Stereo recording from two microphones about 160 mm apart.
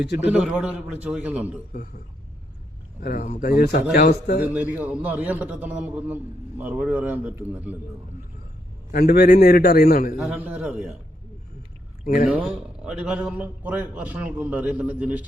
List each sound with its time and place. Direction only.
0.3 s a man's voice: 5° right (ahead or behind)
3.0 s a man's voice: 65° left (ahead or behind)
3.4 s a man's voice: 75° left (ahead or behind)
3.9 s a man's voice: 75° left (ahead or behind)
4.5 s a man's voice: 10° right (ahead or behind)
8.9 s a man's voice: 65° left (ahead or behind)
10.2 s a man's voice: 5° right (ahead or behind)
12.0 s a man's voice: 65° left (ahead or behind)
12.3 s a man's voice: 5° right (ahead or behind)